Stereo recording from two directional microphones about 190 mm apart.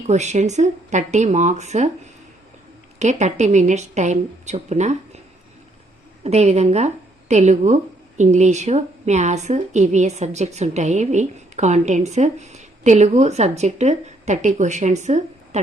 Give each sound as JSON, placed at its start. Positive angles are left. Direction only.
{"t": 0.1, "sound": "a woman's voice", "side_deg": -35}
{"t": 3.0, "sound": "a woman's voice", "side_deg": -35}
{"t": 6.2, "sound": "a woman's voice", "side_deg": -35}